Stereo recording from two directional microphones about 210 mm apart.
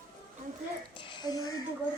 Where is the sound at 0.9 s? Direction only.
20° left (ahead or behind).